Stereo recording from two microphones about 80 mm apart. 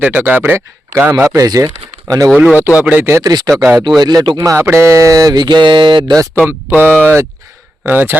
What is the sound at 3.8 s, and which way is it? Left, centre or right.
Speech, right.